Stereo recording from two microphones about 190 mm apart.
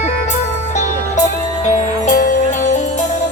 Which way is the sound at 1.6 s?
40° left (ahead or behind).